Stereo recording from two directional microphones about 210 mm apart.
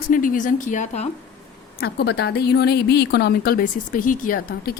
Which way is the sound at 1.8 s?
50° left (ahead or behind).